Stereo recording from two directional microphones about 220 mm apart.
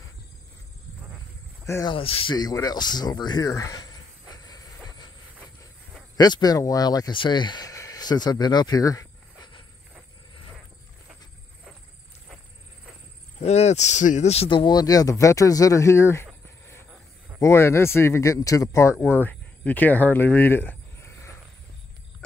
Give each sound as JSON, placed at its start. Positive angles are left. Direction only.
{"t": 1.7, "sound": "speech", "side_deg": 20}
{"t": 4.4, "sound": "train", "side_deg": 15}
{"t": 6.1, "sound": "speech", "side_deg": 20}
{"t": 13.4, "sound": "speech", "side_deg": 30}